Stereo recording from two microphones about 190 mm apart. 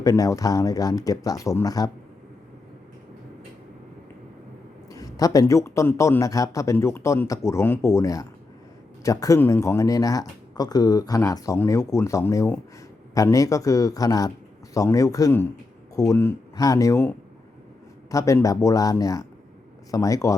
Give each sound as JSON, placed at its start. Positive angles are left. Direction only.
{"t": 0.0, "sound": "speech", "side_deg": 20}
{"t": 4.9, "sound": "speech", "side_deg": 20}
{"t": 18.1, "sound": "speech", "side_deg": 15}